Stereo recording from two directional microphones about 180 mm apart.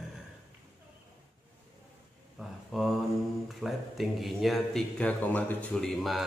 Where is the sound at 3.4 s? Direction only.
Centre (ahead or behind).